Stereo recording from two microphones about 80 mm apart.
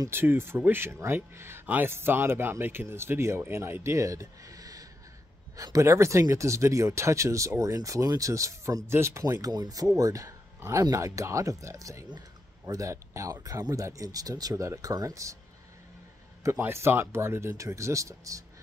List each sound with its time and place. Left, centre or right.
0.1 s speech: right
9.2 s speech: right
14.5 s speech: right
16.4 s speech: right